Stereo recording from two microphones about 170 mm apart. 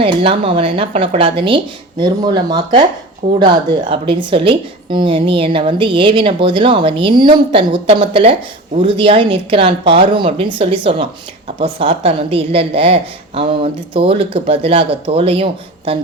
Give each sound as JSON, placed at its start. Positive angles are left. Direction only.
{"t": 0.0, "sound": "a woman's voice", "side_deg": -30}